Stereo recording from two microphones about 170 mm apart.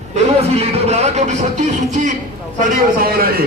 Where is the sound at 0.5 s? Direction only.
40° right (ahead or behind).